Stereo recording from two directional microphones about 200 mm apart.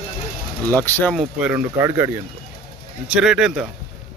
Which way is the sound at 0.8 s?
10° left (ahead or behind).